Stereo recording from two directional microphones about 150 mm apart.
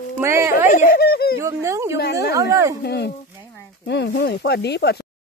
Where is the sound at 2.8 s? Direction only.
90° left.